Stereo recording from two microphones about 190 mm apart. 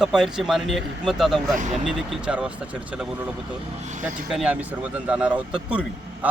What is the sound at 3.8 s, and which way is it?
Speech, 40° right (ahead or behind).